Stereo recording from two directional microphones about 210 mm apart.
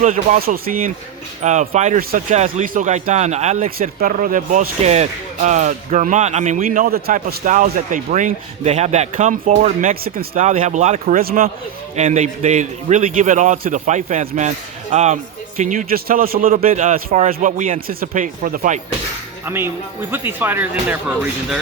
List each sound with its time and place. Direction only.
0.0 s speech: 35° right (ahead or behind)
19.5 s speech: 10° right (ahead or behind)